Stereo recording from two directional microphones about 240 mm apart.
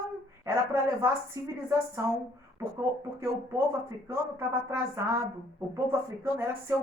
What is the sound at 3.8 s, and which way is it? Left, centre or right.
A woman's voice, centre.